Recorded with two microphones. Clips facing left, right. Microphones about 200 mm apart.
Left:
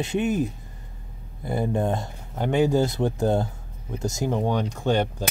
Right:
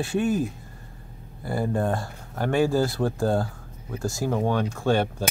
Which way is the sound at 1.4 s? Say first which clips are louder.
Left 1 dB; 20° left (ahead or behind).